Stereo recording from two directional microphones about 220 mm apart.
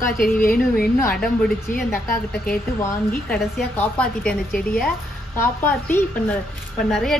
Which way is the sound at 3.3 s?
5° left (ahead or behind).